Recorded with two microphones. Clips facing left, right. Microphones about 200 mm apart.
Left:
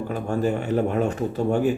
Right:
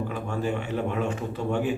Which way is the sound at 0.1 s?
40° left (ahead or behind).